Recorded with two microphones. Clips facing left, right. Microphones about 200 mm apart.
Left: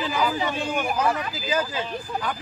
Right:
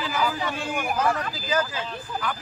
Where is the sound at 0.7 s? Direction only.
10° right (ahead or behind).